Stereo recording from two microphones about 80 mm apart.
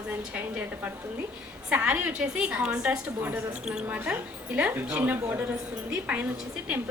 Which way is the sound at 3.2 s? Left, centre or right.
Right.